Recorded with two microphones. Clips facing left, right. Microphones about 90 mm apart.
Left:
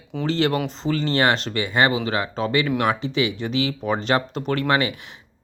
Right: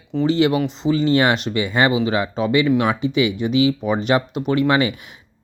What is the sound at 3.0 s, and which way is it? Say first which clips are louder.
Speech: right 4 dB; 30° left (ahead or behind).